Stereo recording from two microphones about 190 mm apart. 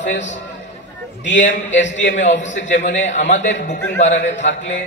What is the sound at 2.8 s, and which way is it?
A man's voice, 40° left (ahead or behind).